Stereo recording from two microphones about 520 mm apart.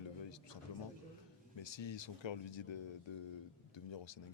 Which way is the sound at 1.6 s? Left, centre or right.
Left.